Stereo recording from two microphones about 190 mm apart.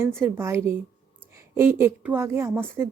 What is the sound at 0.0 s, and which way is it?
Speech, 10° right (ahead or behind).